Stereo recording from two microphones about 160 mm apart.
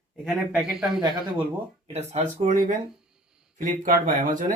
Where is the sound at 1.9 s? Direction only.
45° right (ahead or behind).